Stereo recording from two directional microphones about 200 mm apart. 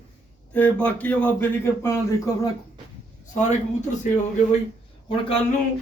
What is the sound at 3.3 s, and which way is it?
Speech, 35° left (ahead or behind).